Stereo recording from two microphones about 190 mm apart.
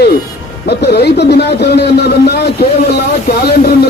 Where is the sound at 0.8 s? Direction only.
60° left (ahead or behind).